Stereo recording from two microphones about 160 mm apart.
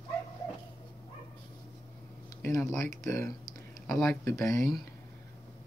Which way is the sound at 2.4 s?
20° left (ahead or behind).